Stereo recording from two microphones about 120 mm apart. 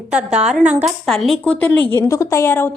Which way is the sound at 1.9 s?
25° left (ahead or behind).